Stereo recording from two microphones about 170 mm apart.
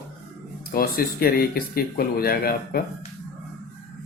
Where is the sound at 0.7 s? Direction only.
60° left (ahead or behind).